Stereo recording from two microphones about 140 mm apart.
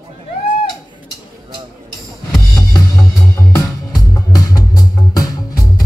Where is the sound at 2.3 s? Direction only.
25° left (ahead or behind).